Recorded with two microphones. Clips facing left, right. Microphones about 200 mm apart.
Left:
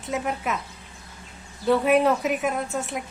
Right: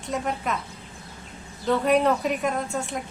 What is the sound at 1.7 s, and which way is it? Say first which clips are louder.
A woman's voice: left 1 dB; 5° left (ahead or behind).